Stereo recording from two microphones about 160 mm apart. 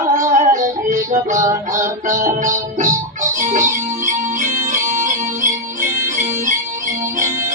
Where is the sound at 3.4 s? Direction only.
50° right (ahead or behind).